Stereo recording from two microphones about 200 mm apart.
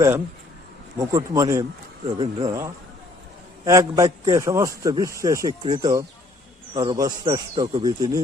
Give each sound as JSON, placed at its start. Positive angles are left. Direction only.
{"t": 0.9, "sound": "a man's voice", "side_deg": -15}